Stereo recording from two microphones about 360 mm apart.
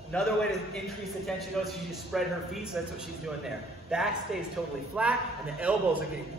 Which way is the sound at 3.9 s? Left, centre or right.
Centre.